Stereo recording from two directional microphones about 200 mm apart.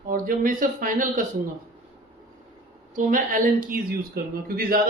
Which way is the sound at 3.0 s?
40° right (ahead or behind).